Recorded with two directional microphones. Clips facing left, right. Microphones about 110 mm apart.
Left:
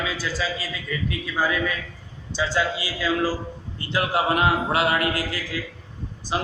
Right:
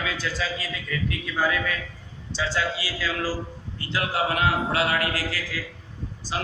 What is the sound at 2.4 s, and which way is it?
Speech, 15° left (ahead or behind).